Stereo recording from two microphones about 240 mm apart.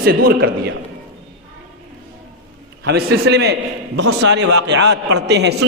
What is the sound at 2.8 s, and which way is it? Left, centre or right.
A man's voice, right.